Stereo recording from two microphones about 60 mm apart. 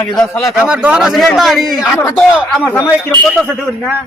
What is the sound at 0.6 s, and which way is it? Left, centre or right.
Speech, right.